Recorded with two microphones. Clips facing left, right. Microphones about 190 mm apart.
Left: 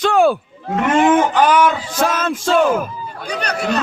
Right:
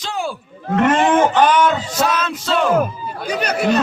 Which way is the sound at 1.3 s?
10° left (ahead or behind).